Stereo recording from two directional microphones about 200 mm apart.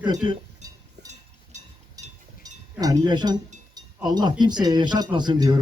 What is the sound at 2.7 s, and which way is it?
Speech, 20° right (ahead or behind).